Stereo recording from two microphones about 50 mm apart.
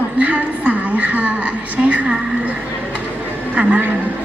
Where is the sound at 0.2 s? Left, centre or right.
Right.